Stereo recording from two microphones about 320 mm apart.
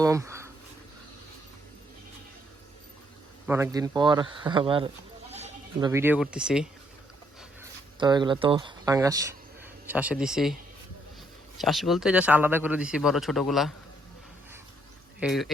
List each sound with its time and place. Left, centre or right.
0.0 s a sound: centre
3.4 s speech: centre
5.3 s bleat: centre
5.9 s speech: centre
7.9 s speech: centre
11.5 s speech: centre
15.2 s speech: centre